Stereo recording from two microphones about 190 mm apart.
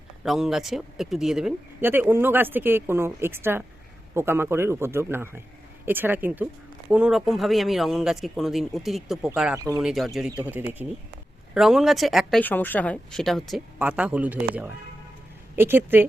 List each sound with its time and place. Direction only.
0.2 s speech: 5° right (ahead or behind)